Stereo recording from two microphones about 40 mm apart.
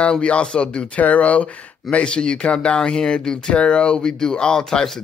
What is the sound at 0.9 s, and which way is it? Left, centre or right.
Speech, left.